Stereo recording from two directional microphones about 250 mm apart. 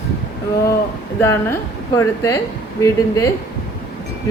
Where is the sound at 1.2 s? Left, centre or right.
Centre.